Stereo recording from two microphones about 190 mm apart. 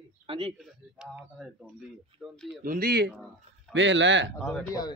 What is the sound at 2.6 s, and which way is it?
Speech, 50° right (ahead or behind).